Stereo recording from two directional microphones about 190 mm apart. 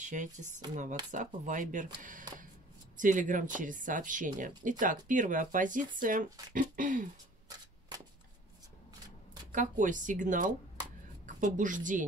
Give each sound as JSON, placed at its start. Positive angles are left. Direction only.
{"t": 0.0, "sound": "speech", "side_deg": -40}
{"t": 7.9, "sound": "a sound", "side_deg": -20}
{"t": 9.5, "sound": "a woman's voice", "side_deg": -40}